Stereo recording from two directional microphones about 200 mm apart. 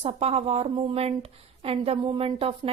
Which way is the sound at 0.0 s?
30° right (ahead or behind).